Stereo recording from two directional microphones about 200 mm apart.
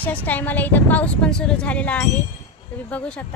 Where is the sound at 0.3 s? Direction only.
10° left (ahead or behind).